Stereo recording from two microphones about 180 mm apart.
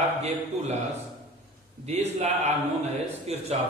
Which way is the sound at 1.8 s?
40° right (ahead or behind).